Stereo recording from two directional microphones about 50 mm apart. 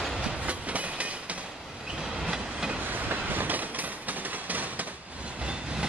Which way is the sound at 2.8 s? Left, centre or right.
Right.